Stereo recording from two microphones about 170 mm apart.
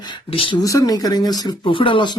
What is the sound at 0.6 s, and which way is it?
Speech, 20° left (ahead or behind).